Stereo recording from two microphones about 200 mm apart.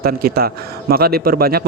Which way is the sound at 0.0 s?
50° right (ahead or behind).